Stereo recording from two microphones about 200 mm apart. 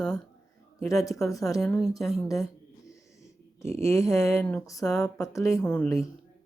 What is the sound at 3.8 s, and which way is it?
Speech, 15° left (ahead or behind).